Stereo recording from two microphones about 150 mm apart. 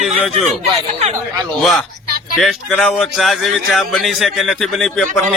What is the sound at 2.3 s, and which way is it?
A man's voice, centre (ahead or behind).